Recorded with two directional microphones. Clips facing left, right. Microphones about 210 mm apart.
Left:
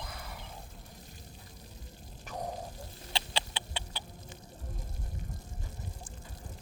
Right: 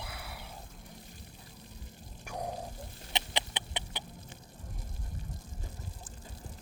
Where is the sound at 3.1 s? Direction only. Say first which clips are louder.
Right 1 dB; 20° right (ahead or behind).